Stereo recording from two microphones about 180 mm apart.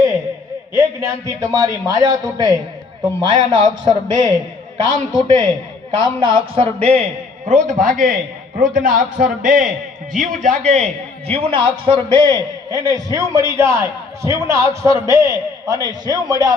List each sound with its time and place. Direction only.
0.7 s a man's voice: 15° right (ahead or behind)